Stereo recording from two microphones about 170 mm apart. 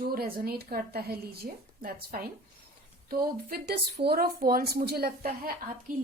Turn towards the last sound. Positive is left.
turn(degrees=-55)  # may be behind; listen again after turning